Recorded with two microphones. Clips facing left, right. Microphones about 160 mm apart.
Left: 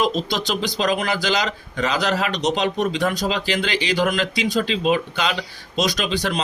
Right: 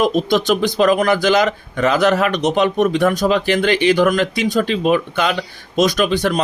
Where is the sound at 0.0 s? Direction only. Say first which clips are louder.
Right 6 dB; 50° right (ahead or behind).